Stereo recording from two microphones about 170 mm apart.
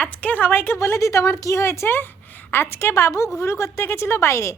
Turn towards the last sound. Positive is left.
turn(degrees=15)  # may be behind; listen again after turning